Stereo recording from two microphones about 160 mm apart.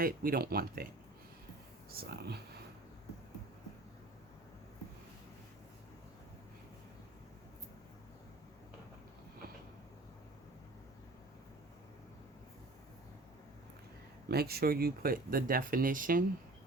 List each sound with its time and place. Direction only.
0.0 s speech: 65° right (ahead or behind)
1.9 s speech: 70° right (ahead or behind)
14.3 s speech: 80° right; by 16.2 s 60° right (ahead or behind)